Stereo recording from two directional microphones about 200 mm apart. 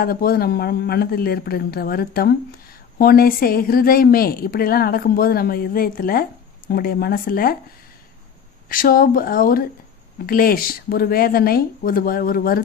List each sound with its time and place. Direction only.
0.0 s a woman's voice: 50° left (ahead or behind)
8.7 s a woman's voice: 45° left (ahead or behind)